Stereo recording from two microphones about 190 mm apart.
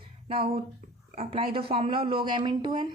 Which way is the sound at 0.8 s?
45° right (ahead or behind).